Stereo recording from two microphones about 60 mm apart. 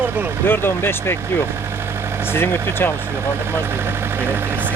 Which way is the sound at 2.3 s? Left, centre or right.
Left.